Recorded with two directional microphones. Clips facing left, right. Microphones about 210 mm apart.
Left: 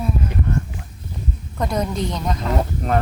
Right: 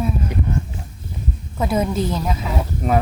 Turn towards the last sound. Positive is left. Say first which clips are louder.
# right 1 dB
turn(degrees=-5)  # may be behind; listen again after turning